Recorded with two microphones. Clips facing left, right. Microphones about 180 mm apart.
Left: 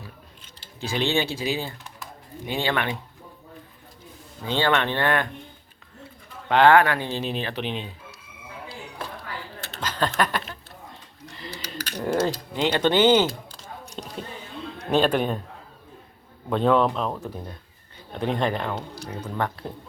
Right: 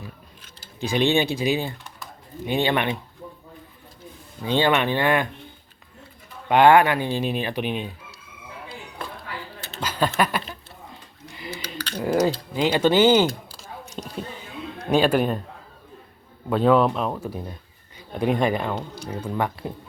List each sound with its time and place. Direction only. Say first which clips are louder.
0.8 s speech: right 4 dB; 15° right (ahead or behind)
4.4 s speech: right 3 dB; 15° right (ahead or behind)
6.5 s speech: right 2 dB; 15° right (ahead or behind)
9.8 s speech: right 2 dB; 10° right (ahead or behind)
11.3 s a sound: right 3 dB; 5° right (ahead or behind)
11.8 s typing: right 1 dB; 10° left (ahead or behind)
12.5 s speech: right 2 dB; 10° right (ahead or behind)
13.2 s a sound: right 3 dB; 5° right (ahead or behind)
16.5 s speech: right 2 dB; 5° right (ahead or behind)
18.7 s speech: right 2 dB; centre (ahead or behind)
19.2 s speech: right 2 dB; 10° right (ahead or behind)